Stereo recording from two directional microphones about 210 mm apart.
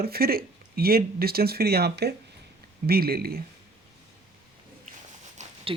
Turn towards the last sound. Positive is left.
turn(degrees=-35)  # may be behind; listen again after turning